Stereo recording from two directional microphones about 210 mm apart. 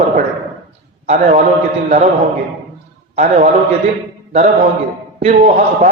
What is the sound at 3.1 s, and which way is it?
Speech, 35° right (ahead or behind).